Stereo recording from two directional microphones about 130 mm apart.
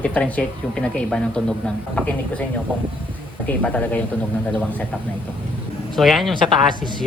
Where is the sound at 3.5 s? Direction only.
10° left (ahead or behind).